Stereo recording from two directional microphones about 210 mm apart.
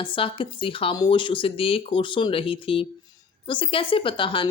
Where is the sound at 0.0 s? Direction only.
25° left (ahead or behind).